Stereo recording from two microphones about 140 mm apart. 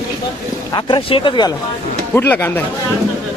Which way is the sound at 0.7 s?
35° left (ahead or behind).